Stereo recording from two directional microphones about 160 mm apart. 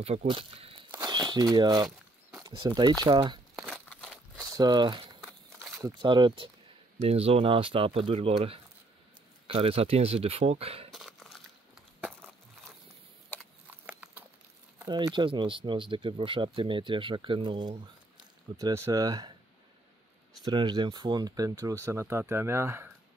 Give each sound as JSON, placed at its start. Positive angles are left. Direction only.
{"t": 0.3, "sound": "speech", "side_deg": -35}
{"t": 3.5, "sound": "a sound", "side_deg": 0}
{"t": 4.6, "sound": "speech", "side_deg": -30}
{"t": 10.9, "sound": "crumpling", "side_deg": 0}
{"t": 13.4, "sound": "horse", "side_deg": -5}
{"t": 14.9, "sound": "speech", "side_deg": -30}
{"t": 20.4, "sound": "speech", "side_deg": -25}